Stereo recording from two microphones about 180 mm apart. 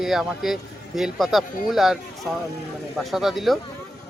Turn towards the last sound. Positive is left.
turn(degrees=0)  # may be behind; listen again after turning